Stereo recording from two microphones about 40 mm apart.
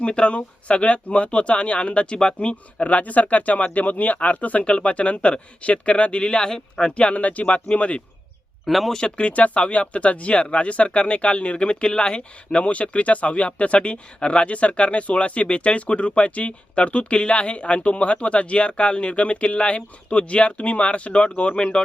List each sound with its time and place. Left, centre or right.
0.0 s speech: left
4.6 s speech: left
8.6 s speech: centre
8.9 s speech: left
9.1 s speech: left